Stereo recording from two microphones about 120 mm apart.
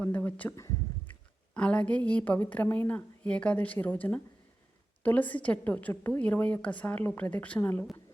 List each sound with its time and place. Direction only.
0.0 s speech: 15° left (ahead or behind)
0.5 s speech: 30° left (ahead or behind)
1.5 s a woman's voice: 10° left (ahead or behind)